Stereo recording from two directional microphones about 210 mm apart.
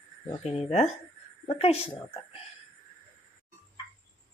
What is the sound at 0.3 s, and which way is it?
A woman's voice, 30° left (ahead or behind).